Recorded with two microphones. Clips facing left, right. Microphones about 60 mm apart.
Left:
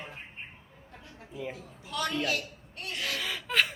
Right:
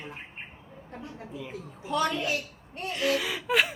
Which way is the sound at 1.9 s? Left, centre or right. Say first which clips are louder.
Right 4 dB; right.